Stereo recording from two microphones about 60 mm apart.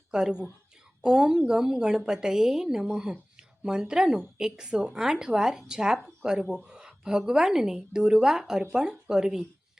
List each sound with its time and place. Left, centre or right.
0.1 s a woman's voice: centre